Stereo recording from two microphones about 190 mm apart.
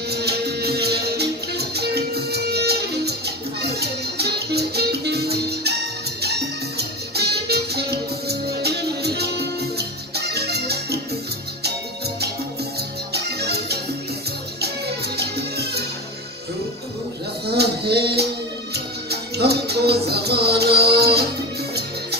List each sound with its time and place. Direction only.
0.1 s music: 60° right (ahead or behind)
13.1 s music: 60° right (ahead or behind)
15.1 s music: 60° right (ahead or behind)
17.5 s a sound: 60° right (ahead or behind)
19.0 s music: 60° right (ahead or behind)